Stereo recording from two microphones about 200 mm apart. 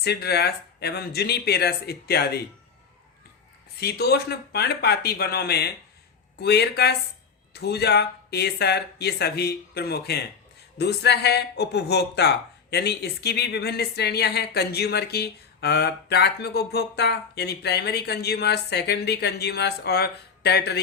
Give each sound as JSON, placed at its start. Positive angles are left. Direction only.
{"t": 0.0, "sound": "speech", "side_deg": 55}
{"t": 3.8, "sound": "speech", "side_deg": 55}